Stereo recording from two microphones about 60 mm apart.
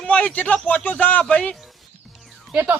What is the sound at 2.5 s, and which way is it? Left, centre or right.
Speech, right.